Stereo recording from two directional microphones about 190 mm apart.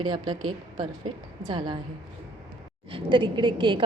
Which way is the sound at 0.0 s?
25° right (ahead or behind).